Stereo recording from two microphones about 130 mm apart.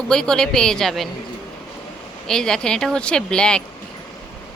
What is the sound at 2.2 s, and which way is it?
Speech, 5° left (ahead or behind).